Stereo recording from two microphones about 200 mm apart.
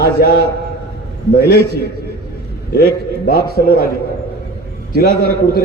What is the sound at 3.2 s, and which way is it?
Speech, 50° left (ahead or behind).